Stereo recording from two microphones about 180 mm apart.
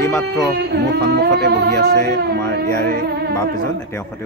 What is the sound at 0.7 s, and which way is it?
Singing, 65° right (ahead or behind).